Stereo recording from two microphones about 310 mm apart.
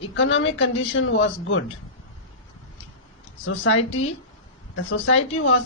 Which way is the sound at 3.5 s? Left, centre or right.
Left.